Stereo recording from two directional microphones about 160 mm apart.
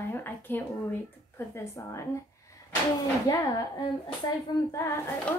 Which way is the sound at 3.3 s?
25° left (ahead or behind).